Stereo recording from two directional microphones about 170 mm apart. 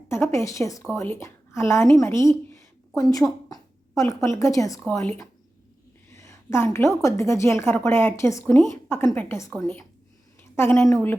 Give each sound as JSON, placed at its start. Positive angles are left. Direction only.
{"t": 0.1, "sound": "a woman's voice", "side_deg": 15}
{"t": 6.1, "sound": "a sound", "side_deg": 15}
{"t": 7.0, "sound": "a woman's voice", "side_deg": 15}